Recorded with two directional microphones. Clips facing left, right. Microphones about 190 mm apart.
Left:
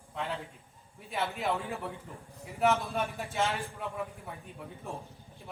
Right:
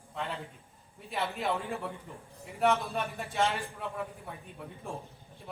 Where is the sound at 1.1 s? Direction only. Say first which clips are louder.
Even; centre (ahead or behind).